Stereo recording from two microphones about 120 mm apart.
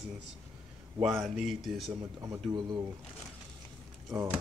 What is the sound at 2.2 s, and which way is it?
Speech, 30° right (ahead or behind).